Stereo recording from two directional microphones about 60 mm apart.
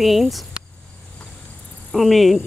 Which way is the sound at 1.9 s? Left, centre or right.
Centre.